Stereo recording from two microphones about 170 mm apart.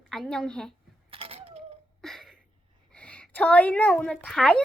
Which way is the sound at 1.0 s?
35° right (ahead or behind).